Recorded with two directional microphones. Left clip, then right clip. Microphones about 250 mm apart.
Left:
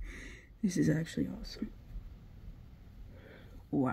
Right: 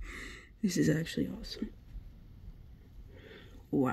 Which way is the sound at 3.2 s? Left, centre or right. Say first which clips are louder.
Right 3 dB; centre.